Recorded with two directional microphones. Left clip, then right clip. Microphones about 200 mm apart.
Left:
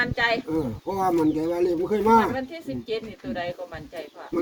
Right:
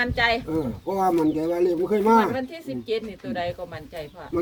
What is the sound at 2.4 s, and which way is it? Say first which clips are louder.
Speech: right 1 dB; 55° right (ahead or behind).